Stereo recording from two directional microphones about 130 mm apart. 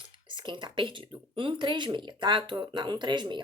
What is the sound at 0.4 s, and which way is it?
Speech, 40° right (ahead or behind).